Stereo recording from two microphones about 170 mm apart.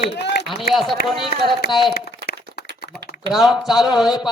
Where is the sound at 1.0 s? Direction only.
65° left (ahead or behind).